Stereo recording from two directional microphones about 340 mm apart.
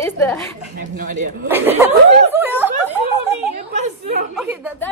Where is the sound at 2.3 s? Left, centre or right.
Centre.